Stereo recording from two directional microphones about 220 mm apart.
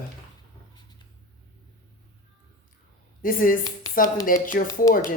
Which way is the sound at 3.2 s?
40° left (ahead or behind).